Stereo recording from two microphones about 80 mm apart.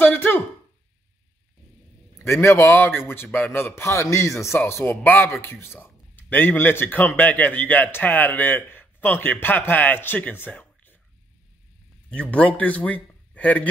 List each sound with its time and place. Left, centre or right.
0.0 s a sound: left
2.1 s a man's voice: left
12.1 s a man's voice: centre